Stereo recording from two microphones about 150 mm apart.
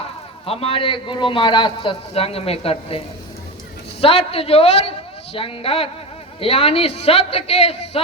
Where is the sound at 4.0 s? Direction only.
40° left (ahead or behind).